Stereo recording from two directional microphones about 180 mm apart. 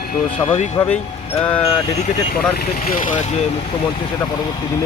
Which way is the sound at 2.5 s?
55° left (ahead or behind).